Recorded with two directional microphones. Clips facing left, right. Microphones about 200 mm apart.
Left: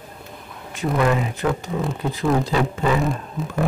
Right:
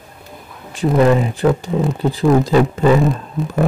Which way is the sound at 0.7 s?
30° right (ahead or behind).